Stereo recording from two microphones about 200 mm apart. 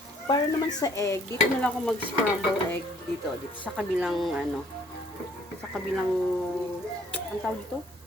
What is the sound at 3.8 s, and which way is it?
Speech, centre (ahead or behind).